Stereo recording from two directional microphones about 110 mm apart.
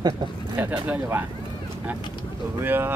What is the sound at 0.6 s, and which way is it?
Speech, 15° right (ahead or behind).